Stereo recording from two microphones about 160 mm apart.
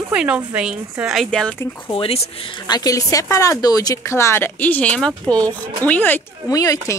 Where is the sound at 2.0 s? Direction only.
35° left (ahead or behind).